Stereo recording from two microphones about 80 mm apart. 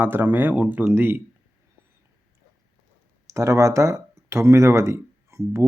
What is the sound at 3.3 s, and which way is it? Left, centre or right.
Speech, right.